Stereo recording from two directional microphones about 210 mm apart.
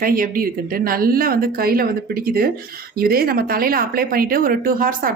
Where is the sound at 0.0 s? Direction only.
45° right (ahead or behind).